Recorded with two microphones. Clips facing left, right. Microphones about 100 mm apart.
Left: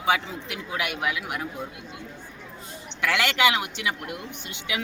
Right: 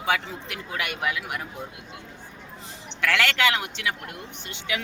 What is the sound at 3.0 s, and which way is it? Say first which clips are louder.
Speech: left 1 dB; 15° left (ahead or behind).